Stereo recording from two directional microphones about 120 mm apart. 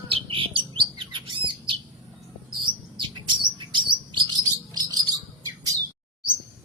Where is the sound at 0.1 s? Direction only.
45° right (ahead or behind).